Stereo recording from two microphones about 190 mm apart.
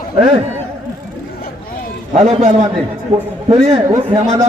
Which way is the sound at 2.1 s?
35° right (ahead or behind).